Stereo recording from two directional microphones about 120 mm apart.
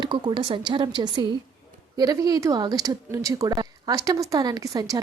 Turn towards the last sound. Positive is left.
turn(degrees=-30)  # may be behind; listen again after turning